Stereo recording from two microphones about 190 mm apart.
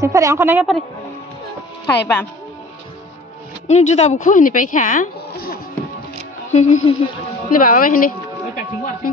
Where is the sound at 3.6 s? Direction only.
35° left (ahead or behind); by 5.6 s 50° left (ahead or behind).